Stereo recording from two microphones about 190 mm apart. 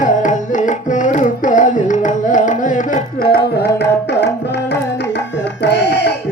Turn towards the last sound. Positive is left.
turn(degrees=60)  # may be behind; listen again after turning